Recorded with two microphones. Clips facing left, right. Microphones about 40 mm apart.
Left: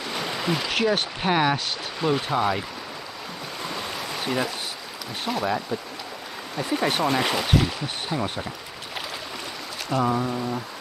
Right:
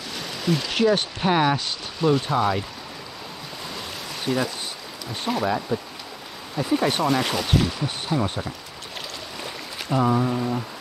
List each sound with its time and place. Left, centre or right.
0.1 s a sound: left
0.7 s speech: centre
3.7 s stream: centre
5.2 s speech: centre
9.8 s speech: centre